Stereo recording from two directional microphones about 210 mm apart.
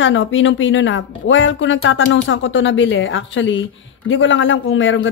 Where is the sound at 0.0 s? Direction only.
65° left (ahead or behind).